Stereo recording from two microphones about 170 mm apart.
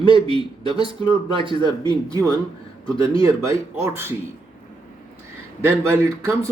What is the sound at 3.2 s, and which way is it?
Speech, 20° right (ahead or behind).